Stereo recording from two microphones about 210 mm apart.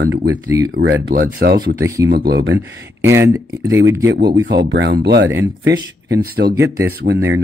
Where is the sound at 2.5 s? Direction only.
10° right (ahead or behind).